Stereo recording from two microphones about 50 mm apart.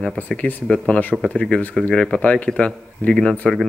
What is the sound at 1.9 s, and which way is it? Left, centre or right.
A man's voice, left.